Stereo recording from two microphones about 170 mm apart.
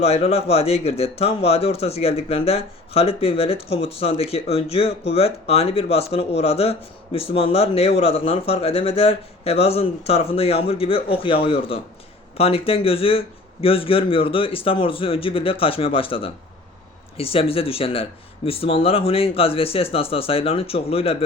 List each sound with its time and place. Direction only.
0.0 s speech: 35° left (ahead or behind)